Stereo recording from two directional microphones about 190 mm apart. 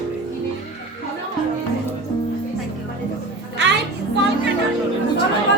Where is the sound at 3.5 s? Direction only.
65° right (ahead or behind).